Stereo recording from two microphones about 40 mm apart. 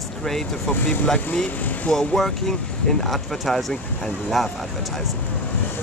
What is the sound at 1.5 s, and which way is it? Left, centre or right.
Speech, left.